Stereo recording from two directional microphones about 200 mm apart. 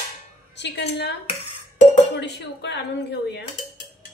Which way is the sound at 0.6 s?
60° left (ahead or behind).